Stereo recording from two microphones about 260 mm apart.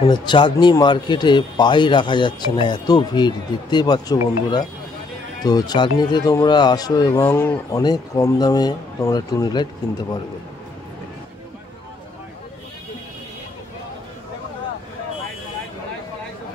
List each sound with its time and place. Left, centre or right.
0.0 s speech: centre